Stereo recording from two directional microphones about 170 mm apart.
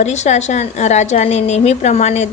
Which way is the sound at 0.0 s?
40° left (ahead or behind).